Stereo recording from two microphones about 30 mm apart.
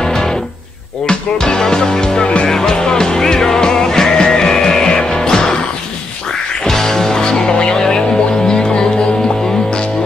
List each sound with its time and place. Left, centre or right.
1.0 s music: left
6.7 s music: centre